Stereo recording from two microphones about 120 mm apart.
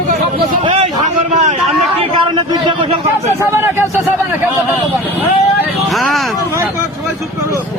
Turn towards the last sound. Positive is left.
turn(degrees=0)  # may be behind; listen again after turning